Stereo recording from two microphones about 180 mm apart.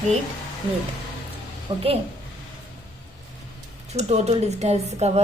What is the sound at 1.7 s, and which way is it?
Speech, 25° right (ahead or behind).